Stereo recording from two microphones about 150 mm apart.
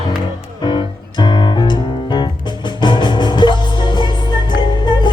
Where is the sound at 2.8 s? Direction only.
30° left (ahead or behind).